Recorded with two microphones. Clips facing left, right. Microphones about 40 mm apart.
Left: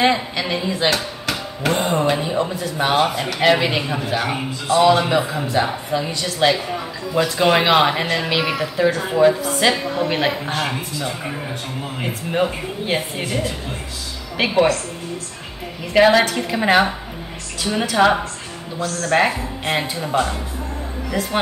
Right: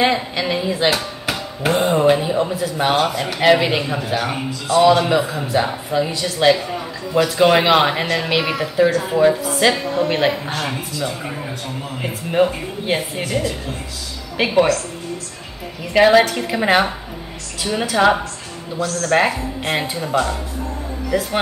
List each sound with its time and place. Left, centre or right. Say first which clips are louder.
0.0 s speech: even; centre
3.0 s speech: even; left
3.3 s speech: right 2 dB; centre
8.9 s speech: right 3 dB; left
9.2 s speech: even; centre
12.0 s speech: right 3 dB; centre
14.3 s a woman's voice: right 1 dB; centre
15.8 s speech: right 1 dB; centre